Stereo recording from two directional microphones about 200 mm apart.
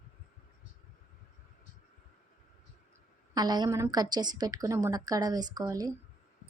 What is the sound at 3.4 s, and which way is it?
A woman's voice, 20° right (ahead or behind).